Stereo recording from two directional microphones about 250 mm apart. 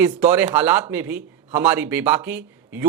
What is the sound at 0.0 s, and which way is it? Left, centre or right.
Speech, centre.